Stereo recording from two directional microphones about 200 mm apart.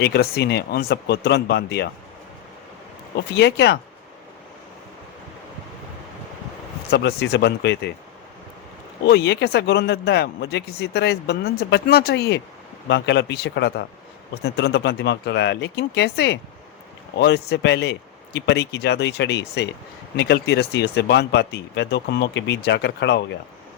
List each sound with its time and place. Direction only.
0.0 s speech: 55° left (ahead or behind)
3.3 s speech: 55° left (ahead or behind)
6.9 s speech: 55° left (ahead or behind)
9.0 s speech: 55° left (ahead or behind)